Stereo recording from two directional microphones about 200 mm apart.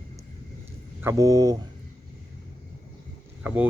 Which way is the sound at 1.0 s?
15° right (ahead or behind).